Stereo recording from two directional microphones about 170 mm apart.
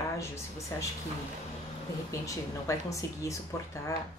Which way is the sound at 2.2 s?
20° left (ahead or behind).